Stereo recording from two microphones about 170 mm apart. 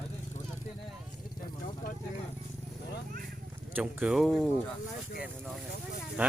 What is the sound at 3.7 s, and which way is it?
Speech, 5° right (ahead or behind).